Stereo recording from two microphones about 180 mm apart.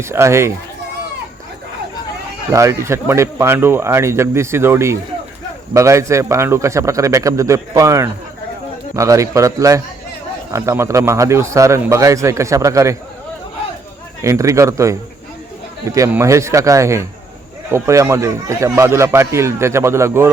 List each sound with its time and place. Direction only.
0.0 s a man's voice: 15° right (ahead or behind)
2.5 s a man's voice: 15° right (ahead or behind)
14.2 s a man's voice: 15° right (ahead or behind)